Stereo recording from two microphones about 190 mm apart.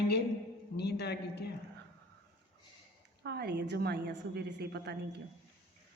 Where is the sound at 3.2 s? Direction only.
60° right (ahead or behind).